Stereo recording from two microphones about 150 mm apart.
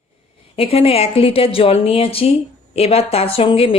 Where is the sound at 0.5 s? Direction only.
40° left (ahead or behind).